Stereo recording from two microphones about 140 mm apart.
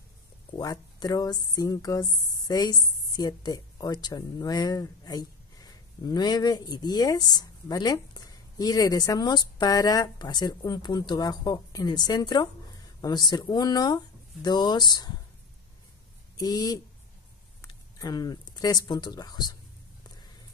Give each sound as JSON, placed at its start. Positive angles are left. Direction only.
{"t": 0.6, "sound": "speech", "side_deg": 30}
{"t": 16.3, "sound": "speech", "side_deg": 30}